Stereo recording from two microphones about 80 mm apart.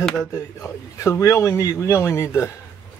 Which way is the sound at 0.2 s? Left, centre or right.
Left.